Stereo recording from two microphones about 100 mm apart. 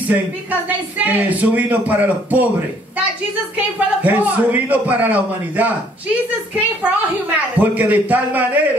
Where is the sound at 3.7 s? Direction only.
15° right (ahead or behind).